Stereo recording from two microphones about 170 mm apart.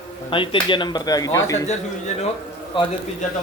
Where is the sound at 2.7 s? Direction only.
30° left (ahead or behind).